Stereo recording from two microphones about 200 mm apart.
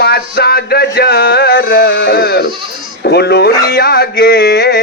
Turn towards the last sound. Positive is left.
turn(degrees=55)  # may be behind; listen again after turning